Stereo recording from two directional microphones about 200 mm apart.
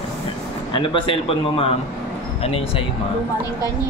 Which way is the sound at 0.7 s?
25° left (ahead or behind).